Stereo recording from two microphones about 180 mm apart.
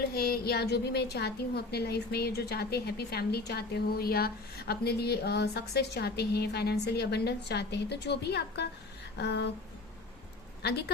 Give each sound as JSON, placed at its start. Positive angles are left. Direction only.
{"t": 0.1, "sound": "a woman's voice", "side_deg": 60}
{"t": 9.1, "sound": "a sound", "side_deg": 70}
{"t": 10.6, "sound": "a woman's voice", "side_deg": 65}